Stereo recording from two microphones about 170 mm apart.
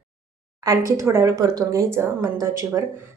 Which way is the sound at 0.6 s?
20° right (ahead or behind).